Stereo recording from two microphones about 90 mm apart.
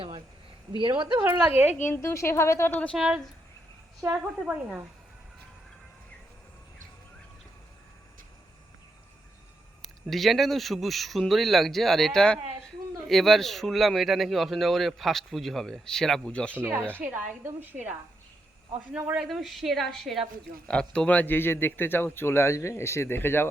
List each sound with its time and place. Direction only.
0.8 s speech: 60° right (ahead or behind)
1.3 s speech: 20° right (ahead or behind)
2.0 s a woman's voice: 30° left (ahead or behind)
2.7 s a woman's voice: 15° left (ahead or behind)
4.1 s a woman's voice: 15° right (ahead or behind)
10.1 s speech: centre (ahead or behind)
16.6 s speech: 20° right (ahead or behind)
19.1 s a man's voice: centre (ahead or behind); by 23.5 s 25° left (ahead or behind)